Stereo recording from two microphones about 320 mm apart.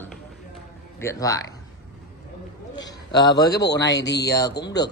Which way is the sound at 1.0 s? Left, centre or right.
Centre.